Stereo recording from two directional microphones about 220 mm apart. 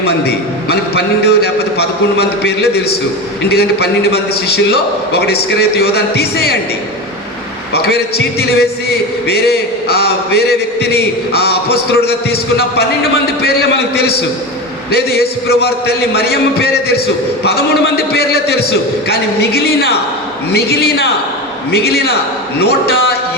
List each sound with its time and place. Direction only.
0.0 s a man's voice: 45° left (ahead or behind)
7.7 s a man's voice: 45° left (ahead or behind)